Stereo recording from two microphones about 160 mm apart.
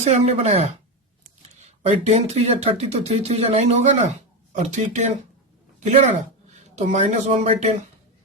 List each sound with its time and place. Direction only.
0.0 s speech: 40° right (ahead or behind)